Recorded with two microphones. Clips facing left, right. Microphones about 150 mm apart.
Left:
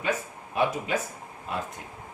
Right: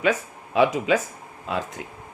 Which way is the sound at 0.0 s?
90° right.